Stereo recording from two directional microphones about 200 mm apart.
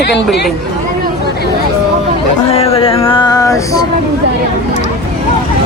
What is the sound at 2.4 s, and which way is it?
Speech, 30° left (ahead or behind).